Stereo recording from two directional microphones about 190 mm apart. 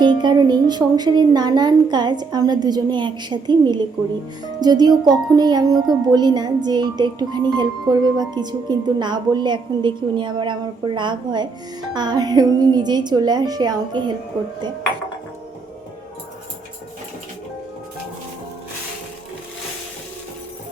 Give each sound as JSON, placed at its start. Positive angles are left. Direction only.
{"t": 0.0, "sound": "music", "side_deg": -25}